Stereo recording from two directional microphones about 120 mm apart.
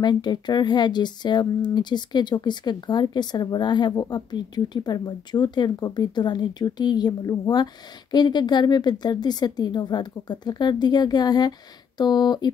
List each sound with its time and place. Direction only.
0.0 s speech: 35° left (ahead or behind)